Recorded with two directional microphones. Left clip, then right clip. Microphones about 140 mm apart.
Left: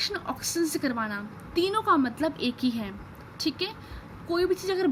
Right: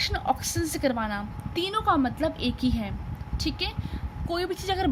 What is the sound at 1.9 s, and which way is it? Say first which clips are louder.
A woman's voice: even; 30° right (ahead or behind).